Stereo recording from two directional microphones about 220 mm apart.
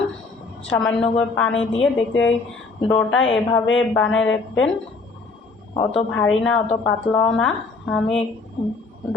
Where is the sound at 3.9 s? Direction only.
5° left (ahead or behind).